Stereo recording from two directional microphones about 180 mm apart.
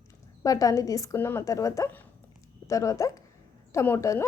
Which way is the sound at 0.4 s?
20° left (ahead or behind).